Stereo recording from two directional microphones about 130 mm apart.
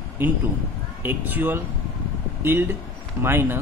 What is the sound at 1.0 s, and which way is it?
Speech, 15° right (ahead or behind).